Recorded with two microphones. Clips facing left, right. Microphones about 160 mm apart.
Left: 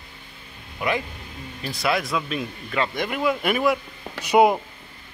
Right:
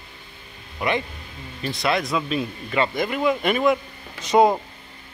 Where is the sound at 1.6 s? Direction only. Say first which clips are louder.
Right 1 dB; centre (ahead or behind).